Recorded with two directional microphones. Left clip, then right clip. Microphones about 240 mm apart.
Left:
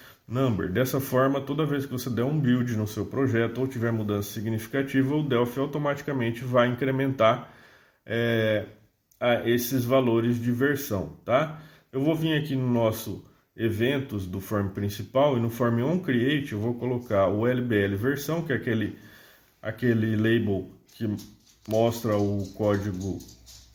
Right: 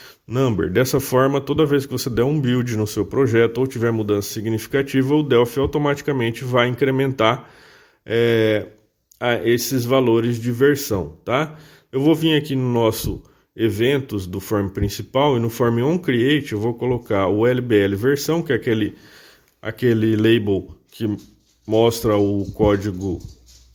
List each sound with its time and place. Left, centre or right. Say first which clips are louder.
0.0 s speech: right 7 dB; right